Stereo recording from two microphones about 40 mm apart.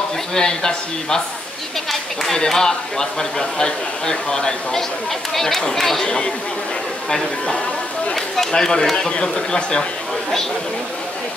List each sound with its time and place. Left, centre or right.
0.3 s speech: centre
2.3 s speech: centre
5.3 s speech: centre
6.0 s speech: left
8.1 s speech: centre